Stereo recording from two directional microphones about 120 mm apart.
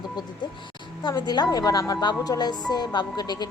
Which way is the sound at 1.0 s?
35° left (ahead or behind).